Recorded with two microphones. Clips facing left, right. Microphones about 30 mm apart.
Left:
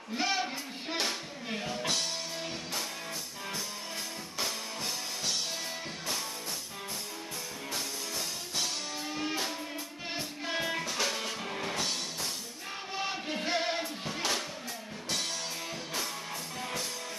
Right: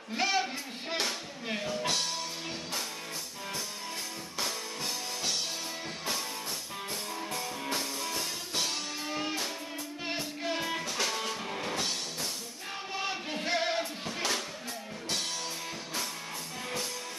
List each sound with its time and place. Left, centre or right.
0.1 s a sound: centre
1.6 s music: centre
4.4 s music: centre
8.5 s music: centre
10.5 s music: centre
12.9 s music: centre